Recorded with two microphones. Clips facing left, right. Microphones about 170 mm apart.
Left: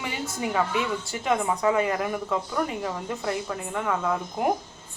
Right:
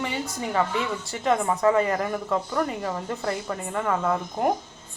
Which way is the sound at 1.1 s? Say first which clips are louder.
Right 3 dB; centre (ahead or behind).